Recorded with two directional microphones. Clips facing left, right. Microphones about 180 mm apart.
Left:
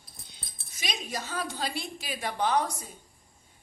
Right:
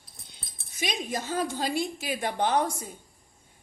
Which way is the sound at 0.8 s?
50° right (ahead or behind).